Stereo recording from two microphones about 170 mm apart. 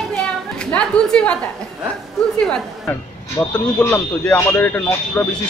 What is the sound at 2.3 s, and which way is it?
A woman's voice, 5° left (ahead or behind).